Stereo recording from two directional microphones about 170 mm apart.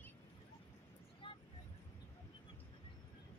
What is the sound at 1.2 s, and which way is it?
Vehicle, 30° left (ahead or behind).